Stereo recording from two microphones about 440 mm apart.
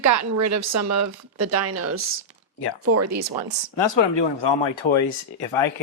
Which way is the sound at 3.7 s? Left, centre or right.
Left.